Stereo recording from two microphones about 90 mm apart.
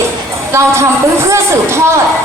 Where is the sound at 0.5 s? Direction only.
30° right (ahead or behind).